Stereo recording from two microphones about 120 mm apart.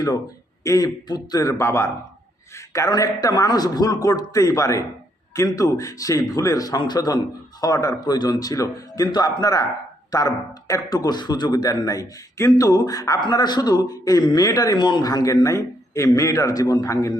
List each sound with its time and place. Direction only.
0.6 s a man's voice: 30° left (ahead or behind)